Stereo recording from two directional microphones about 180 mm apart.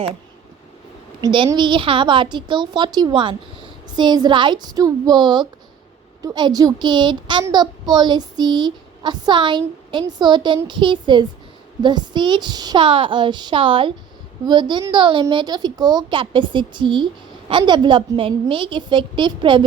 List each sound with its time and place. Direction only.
1.2 s child singing: 25° right (ahead or behind)